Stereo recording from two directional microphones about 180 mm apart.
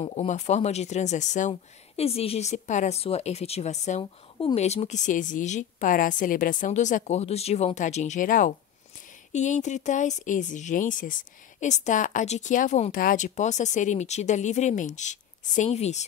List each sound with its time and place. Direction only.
0.0 s speech: 30° left (ahead or behind)
4.0 s speech: 25° left (ahead or behind)
4.6 s a woman's voice: 35° left (ahead or behind)